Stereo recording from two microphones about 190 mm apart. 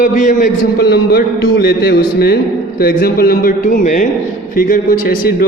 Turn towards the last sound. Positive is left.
turn(degrees=50)  # may be behind; listen again after turning